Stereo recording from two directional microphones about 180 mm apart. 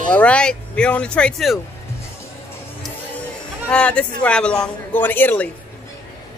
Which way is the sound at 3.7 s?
5° left (ahead or behind).